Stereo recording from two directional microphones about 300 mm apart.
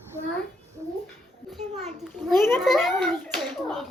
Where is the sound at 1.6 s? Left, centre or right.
Right.